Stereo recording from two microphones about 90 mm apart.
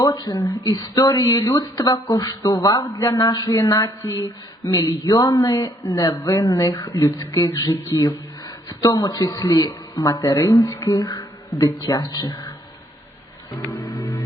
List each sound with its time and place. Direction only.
0.0 s speech: 45° left (ahead or behind)
13.8 s music: 35° left (ahead or behind)